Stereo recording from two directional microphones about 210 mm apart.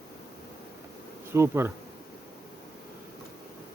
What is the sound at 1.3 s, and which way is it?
Bee, 10° right (ahead or behind).